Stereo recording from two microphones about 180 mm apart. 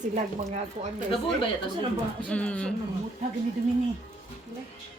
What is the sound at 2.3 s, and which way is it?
Speech, 5° left (ahead or behind).